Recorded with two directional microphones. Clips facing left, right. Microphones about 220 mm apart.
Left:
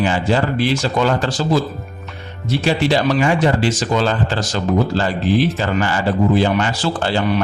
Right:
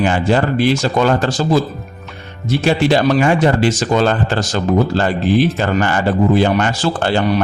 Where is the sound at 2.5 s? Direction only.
50° right (ahead or behind).